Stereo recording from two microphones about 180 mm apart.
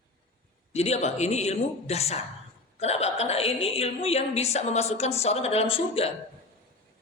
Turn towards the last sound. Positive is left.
turn(degrees=30)  # may be behind; listen again after turning